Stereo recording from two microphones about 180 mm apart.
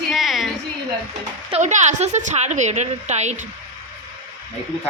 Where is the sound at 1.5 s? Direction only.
40° right (ahead or behind).